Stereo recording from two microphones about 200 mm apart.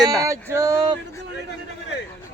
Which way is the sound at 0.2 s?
15° right (ahead or behind).